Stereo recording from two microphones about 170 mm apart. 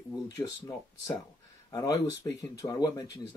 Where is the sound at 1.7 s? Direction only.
20° left (ahead or behind).